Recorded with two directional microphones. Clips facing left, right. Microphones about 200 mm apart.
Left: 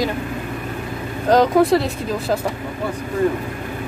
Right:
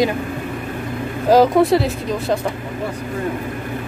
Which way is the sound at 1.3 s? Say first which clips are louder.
Right 1 dB; centre (ahead or behind).